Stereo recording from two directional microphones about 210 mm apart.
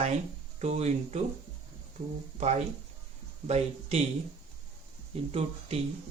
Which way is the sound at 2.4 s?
30° right (ahead or behind).